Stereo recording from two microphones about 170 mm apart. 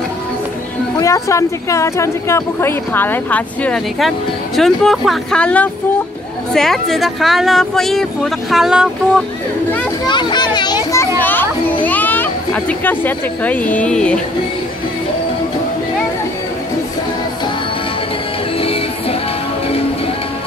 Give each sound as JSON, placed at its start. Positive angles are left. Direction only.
{"t": 0.9, "sound": "speech", "side_deg": 20}
{"t": 10.0, "sound": "children playing", "side_deg": 25}
{"t": 11.2, "sound": "children playing", "side_deg": 10}
{"t": 18.6, "sound": "music", "side_deg": 35}